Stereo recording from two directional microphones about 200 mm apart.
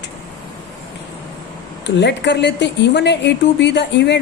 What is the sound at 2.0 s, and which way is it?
A woman's voice, 60° left (ahead or behind).